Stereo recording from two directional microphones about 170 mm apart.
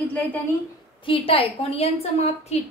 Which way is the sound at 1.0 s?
30° left (ahead or behind).